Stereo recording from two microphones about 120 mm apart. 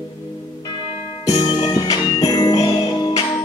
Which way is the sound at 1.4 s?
35° left (ahead or behind).